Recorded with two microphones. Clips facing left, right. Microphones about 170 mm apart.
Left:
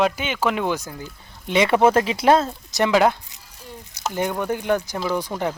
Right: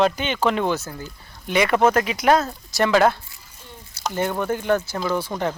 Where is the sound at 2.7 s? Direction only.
15° left (ahead or behind).